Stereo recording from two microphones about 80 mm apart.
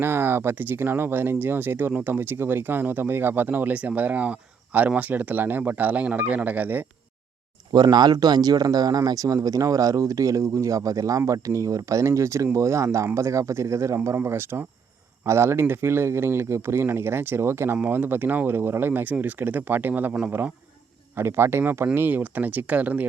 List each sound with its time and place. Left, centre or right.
0.0 s speech: right
7.7 s speech: right
21.2 s speech: right